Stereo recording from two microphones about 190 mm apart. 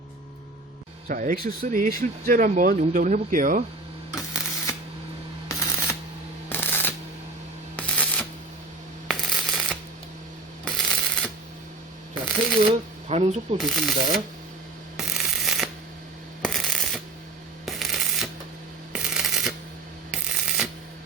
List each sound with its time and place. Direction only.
1.0 s speech: 45° right (ahead or behind)
5.5 s a sound: 15° left (ahead or behind)
6.5 s shuffling cards: 10° left (ahead or behind)
7.8 s coin: 5° left (ahead or behind)
10.7 s shuffling cards: centre (ahead or behind)
12.6 s shuffling cards: 30° right (ahead or behind)
13.6 s speech: centre (ahead or behind)
14.9 s a sound: centre (ahead or behind)
18.9 s shuffling cards: 5° right (ahead or behind)